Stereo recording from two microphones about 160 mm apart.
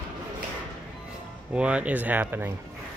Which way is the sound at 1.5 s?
5° right (ahead or behind).